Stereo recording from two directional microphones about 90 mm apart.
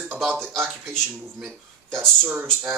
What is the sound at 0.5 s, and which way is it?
Speech, 25° right (ahead or behind).